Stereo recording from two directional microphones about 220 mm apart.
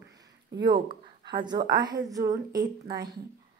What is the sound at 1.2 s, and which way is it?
A woman's voice, 20° right (ahead or behind).